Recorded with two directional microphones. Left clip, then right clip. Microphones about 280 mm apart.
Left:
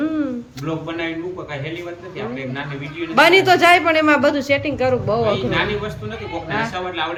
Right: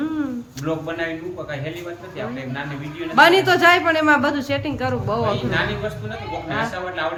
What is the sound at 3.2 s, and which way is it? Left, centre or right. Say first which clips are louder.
A man's voice: left 1 dB; centre.